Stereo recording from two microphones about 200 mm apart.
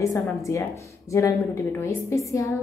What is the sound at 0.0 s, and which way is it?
A woman's voice, 15° left (ahead or behind).